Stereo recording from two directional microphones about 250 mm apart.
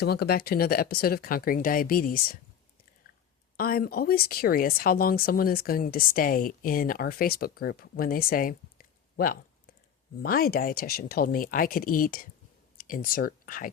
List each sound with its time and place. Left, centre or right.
0.0 s speech: left
3.6 s speech: left